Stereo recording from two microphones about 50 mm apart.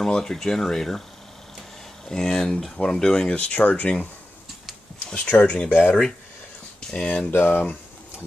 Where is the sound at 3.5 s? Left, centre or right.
Left.